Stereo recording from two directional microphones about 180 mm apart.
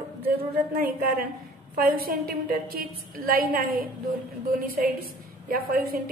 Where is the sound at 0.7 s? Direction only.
55° right (ahead or behind).